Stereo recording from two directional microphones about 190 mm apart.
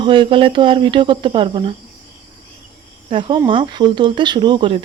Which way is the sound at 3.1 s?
25° right (ahead or behind).